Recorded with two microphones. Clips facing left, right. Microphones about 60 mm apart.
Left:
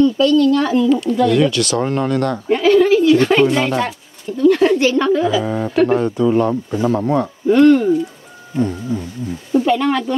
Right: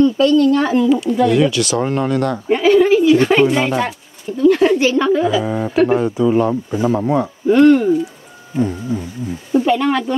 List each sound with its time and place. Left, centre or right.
0.0 s speech: right
0.8 s speech: centre